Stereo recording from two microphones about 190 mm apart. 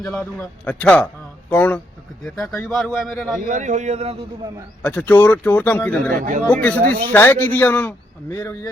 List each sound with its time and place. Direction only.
0.1 s speech: 10° left (ahead or behind)
3.5 s a man's voice: 40° right (ahead or behind)
4.8 s speech: 5° left (ahead or behind)
6.1 s speech: 45° right (ahead or behind)
6.5 s speech: 5° left (ahead or behind)